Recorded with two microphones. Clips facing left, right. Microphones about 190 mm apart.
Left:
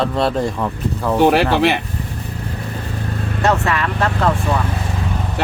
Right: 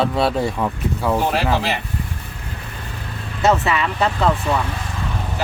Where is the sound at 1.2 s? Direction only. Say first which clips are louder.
Left 12 dB; 75° left (ahead or behind).